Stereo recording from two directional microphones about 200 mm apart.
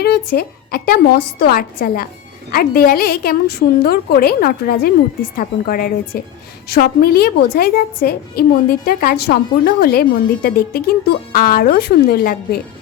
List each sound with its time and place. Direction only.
0.0 s a woman's voice: 50° left (ahead or behind)